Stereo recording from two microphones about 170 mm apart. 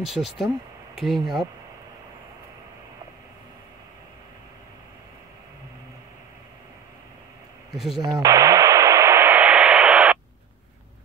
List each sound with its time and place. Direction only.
0.0 s speech: centre (ahead or behind)
7.7 s speech: centre (ahead or behind)
8.0 s radio: 20° right (ahead or behind)